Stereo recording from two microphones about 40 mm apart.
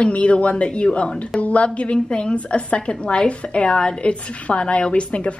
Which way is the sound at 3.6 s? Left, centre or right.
Centre.